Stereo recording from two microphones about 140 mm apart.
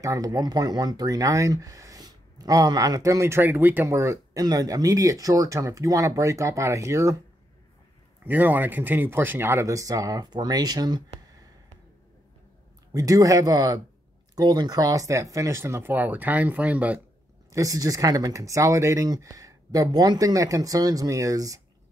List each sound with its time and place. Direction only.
0.0 s speech: 25° right (ahead or behind)
8.3 s speech: 15° right (ahead or behind); by 11.1 s 30° right (ahead or behind)
12.9 s speech: 25° right (ahead or behind)
17.5 s speech: 25° right (ahead or behind)